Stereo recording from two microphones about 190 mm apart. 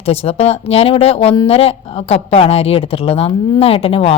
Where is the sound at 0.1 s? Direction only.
30° left (ahead or behind).